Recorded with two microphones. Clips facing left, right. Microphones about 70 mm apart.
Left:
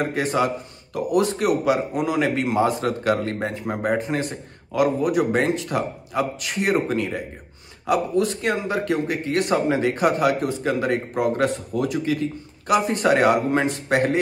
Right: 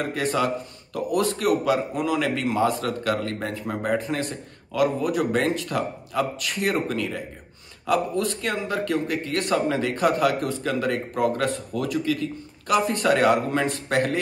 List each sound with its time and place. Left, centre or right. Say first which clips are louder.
0.0 s a man's voice: left 2 dB; left